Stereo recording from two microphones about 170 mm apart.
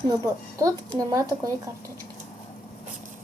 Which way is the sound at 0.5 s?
20° right (ahead or behind).